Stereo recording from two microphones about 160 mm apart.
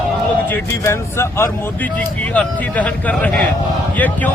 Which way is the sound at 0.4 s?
15° left (ahead or behind).